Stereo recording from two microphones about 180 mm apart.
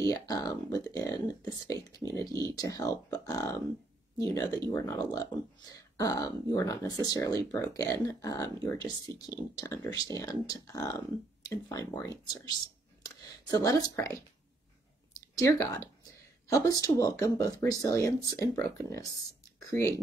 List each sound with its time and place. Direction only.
0.0 s speech: 20° left (ahead or behind)
15.3 s speech: 15° left (ahead or behind)